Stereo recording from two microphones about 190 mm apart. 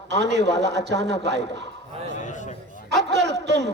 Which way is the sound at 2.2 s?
40° left (ahead or behind).